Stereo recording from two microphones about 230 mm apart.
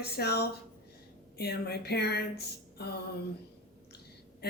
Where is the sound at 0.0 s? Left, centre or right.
Left.